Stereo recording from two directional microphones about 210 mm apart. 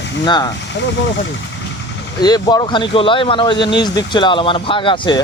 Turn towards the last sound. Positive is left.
turn(degrees=25)  # may be behind; listen again after turning